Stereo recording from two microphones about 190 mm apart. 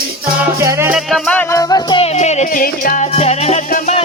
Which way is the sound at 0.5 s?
15° right (ahead or behind).